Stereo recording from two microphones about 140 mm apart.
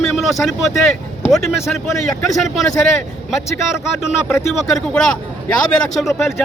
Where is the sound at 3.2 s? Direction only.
Centre (ahead or behind).